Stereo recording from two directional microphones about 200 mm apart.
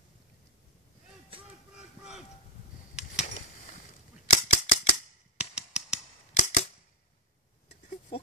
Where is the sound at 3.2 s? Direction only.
35° left (ahead or behind).